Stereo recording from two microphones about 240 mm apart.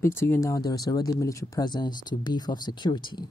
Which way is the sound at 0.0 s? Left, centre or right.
Centre.